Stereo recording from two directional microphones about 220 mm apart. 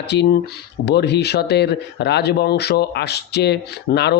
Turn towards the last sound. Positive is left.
turn(degrees=50)  # may be behind; listen again after turning